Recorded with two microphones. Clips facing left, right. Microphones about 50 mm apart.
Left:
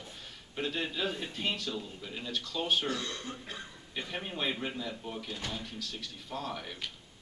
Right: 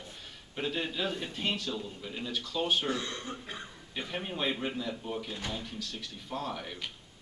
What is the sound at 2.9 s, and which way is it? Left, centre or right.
Speech, right.